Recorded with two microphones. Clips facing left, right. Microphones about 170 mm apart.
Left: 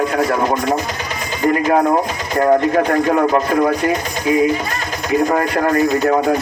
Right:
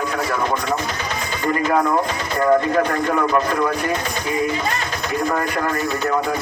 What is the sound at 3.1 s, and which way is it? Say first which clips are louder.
Speech: left 2 dB; 40° left (ahead or behind).